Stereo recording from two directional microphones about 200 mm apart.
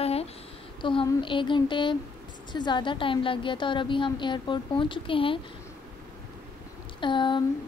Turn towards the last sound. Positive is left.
turn(degrees=25)  # may be behind; listen again after turning